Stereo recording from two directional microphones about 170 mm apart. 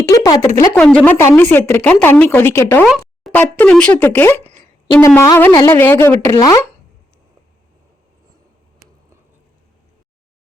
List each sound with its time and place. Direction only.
0.0 s speech: 20° left (ahead or behind)
2.8 s a sound: centre (ahead or behind)
3.3 s speech: 10° left (ahead or behind)